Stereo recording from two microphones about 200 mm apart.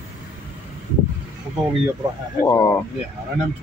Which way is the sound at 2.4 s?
15° left (ahead or behind).